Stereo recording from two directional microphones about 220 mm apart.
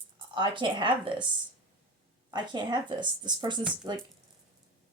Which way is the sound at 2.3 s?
20° right (ahead or behind).